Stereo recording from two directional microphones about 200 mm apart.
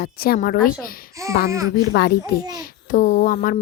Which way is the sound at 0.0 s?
50° left (ahead or behind).